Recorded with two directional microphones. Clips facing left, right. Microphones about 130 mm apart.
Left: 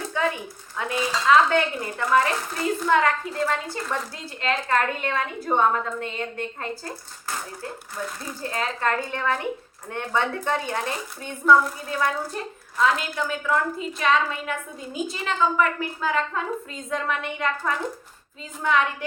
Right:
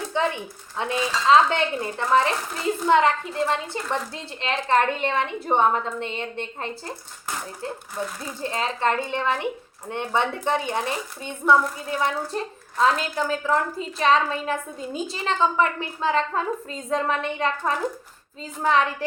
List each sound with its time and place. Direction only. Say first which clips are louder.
0.1 s a sound: right 1 dB; 25° right (ahead or behind)
0.8 s a woman's voice: right 1 dB; 25° right (ahead or behind)
8.0 s a woman's voice: right 2 dB; 25° right (ahead or behind)